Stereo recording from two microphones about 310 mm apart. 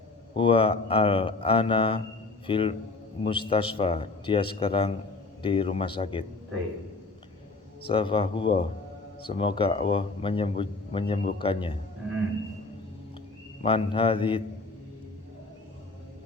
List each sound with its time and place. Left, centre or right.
0.3 s speech: centre
7.9 s speech: centre
13.6 s speech: centre